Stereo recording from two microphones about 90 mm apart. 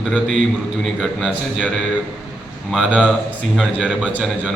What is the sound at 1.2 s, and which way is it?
Speech, 10° right (ahead or behind).